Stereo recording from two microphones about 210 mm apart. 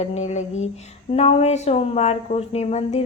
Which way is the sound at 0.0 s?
30° left (ahead or behind).